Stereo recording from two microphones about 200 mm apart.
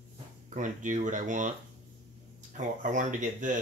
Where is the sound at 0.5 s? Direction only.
40° right (ahead or behind).